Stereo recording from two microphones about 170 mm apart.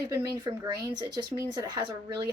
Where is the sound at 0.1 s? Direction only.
20° right (ahead or behind).